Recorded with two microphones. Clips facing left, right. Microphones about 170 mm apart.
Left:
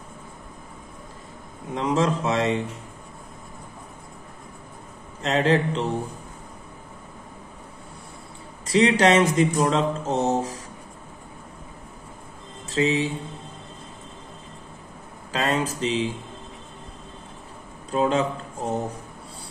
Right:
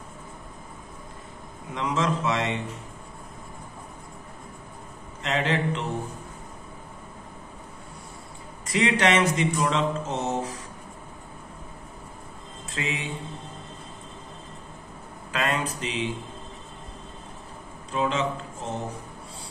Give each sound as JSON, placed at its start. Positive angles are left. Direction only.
{"t": 1.7, "sound": "mantra", "side_deg": 35}
{"t": 5.2, "sound": "mantra", "side_deg": 35}
{"t": 8.6, "sound": "mantra", "side_deg": 35}
{"t": 12.7, "sound": "mantra", "side_deg": 30}
{"t": 15.3, "sound": "mantra", "side_deg": 35}
{"t": 17.9, "sound": "mantra", "side_deg": 40}